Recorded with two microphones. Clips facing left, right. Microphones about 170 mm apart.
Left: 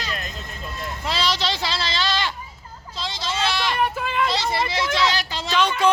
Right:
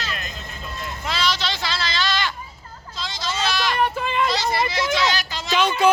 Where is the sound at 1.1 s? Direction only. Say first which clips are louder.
Left 1 dB; 35° left (ahead or behind).